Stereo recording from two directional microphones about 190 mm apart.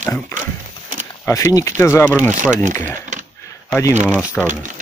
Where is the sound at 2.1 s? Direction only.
10° right (ahead or behind).